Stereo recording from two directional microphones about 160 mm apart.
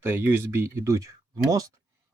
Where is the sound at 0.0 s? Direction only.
15° right (ahead or behind).